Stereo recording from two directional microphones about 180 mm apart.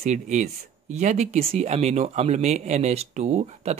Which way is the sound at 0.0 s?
40° right (ahead or behind).